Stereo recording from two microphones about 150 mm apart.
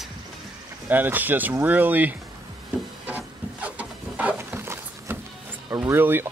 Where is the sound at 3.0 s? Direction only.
10° right (ahead or behind).